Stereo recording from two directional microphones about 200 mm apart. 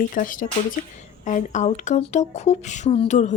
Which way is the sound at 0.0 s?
40° left (ahead or behind).